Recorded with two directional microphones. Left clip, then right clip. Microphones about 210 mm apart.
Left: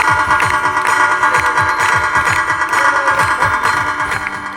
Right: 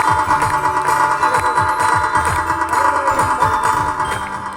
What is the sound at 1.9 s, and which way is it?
Music, 65° right (ahead or behind).